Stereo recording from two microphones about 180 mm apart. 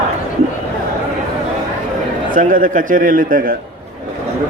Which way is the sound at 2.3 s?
50° right (ahead or behind).